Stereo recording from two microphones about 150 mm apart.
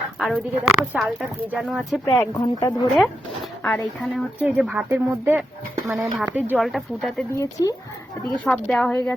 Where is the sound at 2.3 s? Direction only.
25° left (ahead or behind).